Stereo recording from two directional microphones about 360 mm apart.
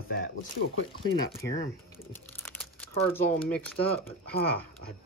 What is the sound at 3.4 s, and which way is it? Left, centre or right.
Speech, centre.